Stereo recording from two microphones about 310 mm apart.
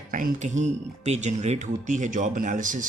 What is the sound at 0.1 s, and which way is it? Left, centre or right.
Speech, right.